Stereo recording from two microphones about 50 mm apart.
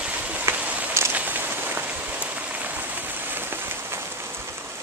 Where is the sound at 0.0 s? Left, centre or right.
Right.